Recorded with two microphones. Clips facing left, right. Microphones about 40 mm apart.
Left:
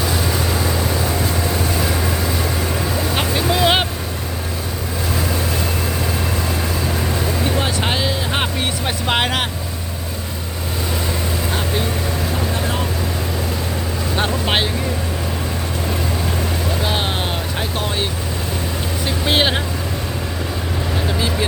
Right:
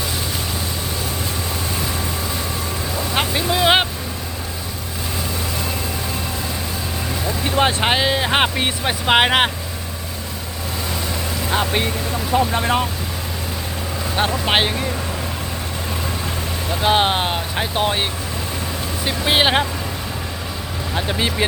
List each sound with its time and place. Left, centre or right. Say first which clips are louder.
3.2 s vehicle: even; centre
7.5 s boat: right 3 dB; right
8.2 s music: right 3 dB; right
8.8 s vehicle: right 5 dB; centre
12.5 s vehicle: right 4 dB; right
14.2 s vehicle: right 1 dB; centre
16.8 s vehicle: right 9 dB; right
19.0 s vehicle: right 1 dB; centre
21.1 s vehicle: right 2 dB; right